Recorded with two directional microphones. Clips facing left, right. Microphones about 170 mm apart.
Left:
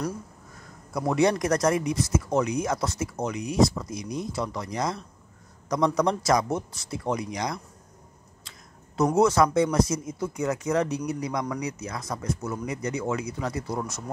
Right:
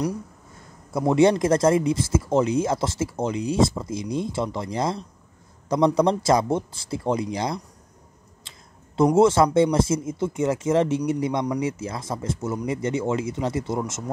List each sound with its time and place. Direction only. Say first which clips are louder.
0.9 s speech: right 5 dB; 25° right (ahead or behind)